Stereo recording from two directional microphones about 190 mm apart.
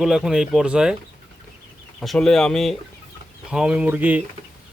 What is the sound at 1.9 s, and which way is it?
Speech, centre (ahead or behind).